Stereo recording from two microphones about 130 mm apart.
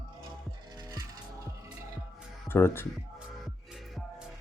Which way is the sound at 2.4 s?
15° left (ahead or behind).